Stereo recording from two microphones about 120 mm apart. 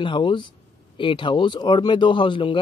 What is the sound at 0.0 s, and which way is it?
A man's voice, 40° left (ahead or behind).